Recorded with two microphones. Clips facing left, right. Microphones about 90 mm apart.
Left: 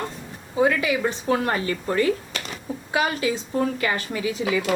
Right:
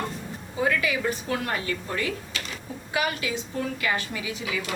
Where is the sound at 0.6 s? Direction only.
25° left (ahead or behind).